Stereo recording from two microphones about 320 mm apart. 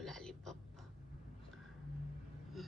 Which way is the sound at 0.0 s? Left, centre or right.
Centre.